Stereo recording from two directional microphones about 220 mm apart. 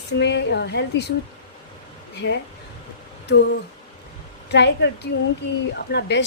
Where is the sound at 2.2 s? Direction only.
50° left (ahead or behind).